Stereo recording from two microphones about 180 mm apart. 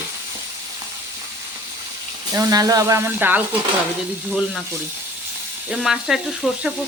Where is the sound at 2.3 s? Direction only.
20° right (ahead or behind).